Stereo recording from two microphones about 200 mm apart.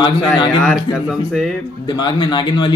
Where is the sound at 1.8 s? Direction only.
20° left (ahead or behind).